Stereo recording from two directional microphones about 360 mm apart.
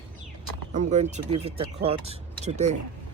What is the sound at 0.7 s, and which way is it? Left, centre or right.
Speech, centre.